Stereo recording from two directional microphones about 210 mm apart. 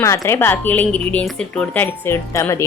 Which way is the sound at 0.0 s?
15° left (ahead or behind).